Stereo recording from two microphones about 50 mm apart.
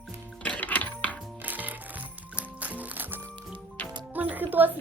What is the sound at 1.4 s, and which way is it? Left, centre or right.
Music, right.